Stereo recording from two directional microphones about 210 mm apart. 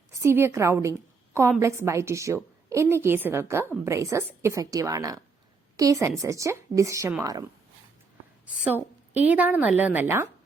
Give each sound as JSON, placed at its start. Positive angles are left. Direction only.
{"t": 0.1, "sound": "a woman's voice", "side_deg": -15}